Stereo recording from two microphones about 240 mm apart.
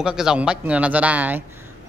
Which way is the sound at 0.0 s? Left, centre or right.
Centre.